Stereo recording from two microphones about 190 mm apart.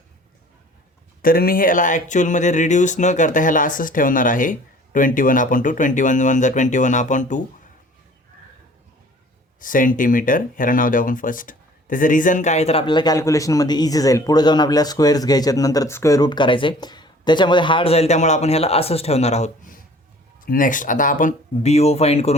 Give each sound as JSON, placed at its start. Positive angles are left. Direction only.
{"t": 1.2, "sound": "speech", "side_deg": 50}
{"t": 9.6, "sound": "speech", "side_deg": 45}